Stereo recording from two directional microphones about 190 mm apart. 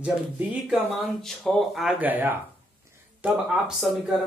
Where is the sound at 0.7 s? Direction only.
Centre (ahead or behind).